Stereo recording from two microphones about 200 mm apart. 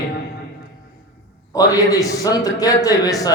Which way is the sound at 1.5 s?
20° left (ahead or behind).